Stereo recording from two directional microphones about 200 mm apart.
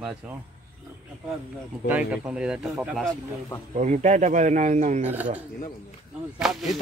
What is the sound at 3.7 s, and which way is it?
Speech, 35° right (ahead or behind).